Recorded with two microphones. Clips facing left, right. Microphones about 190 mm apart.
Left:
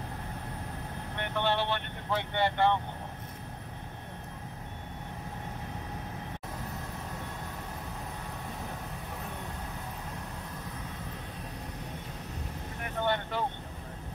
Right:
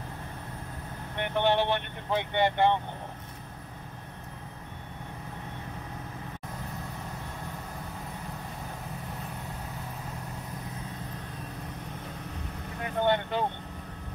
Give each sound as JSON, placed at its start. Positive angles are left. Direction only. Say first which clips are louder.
{"t": 1.1, "sound": "speech", "louder": "right 5 dB", "side_deg": -15}
{"t": 13.0, "sound": "speech", "louder": "right 4 dB", "side_deg": -20}